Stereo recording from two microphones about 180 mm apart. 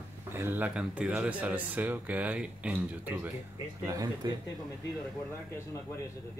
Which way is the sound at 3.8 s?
20° right (ahead or behind).